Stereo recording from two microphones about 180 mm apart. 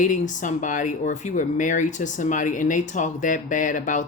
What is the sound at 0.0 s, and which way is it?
Speech, 45° left (ahead or behind).